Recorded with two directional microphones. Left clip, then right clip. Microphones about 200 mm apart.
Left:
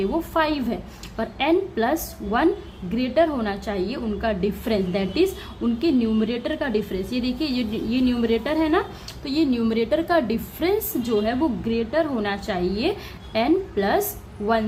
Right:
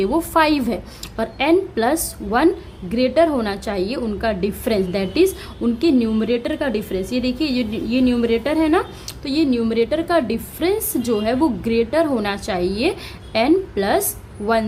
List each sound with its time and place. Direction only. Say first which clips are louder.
0.0 s a woman's voice: right 6 dB; 25° right (ahead or behind)